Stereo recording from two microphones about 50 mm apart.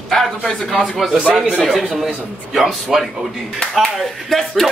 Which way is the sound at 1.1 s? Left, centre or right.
Centre.